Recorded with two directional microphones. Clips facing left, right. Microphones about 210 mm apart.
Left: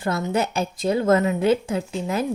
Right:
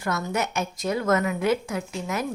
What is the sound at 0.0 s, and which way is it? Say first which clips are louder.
A woman's voice: left 4 dB; 25° left (ahead or behind).